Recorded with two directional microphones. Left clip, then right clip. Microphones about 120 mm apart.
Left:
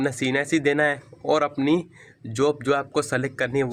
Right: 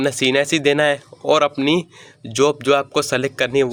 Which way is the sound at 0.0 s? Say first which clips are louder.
Right 7 dB; 40° right (ahead or behind).